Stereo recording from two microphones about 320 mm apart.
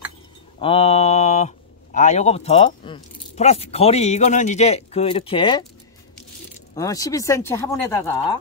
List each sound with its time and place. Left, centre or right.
0.6 s speech: centre
6.7 s speech: centre